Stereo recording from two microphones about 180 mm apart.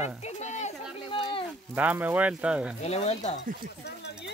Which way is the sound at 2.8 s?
35° left (ahead or behind).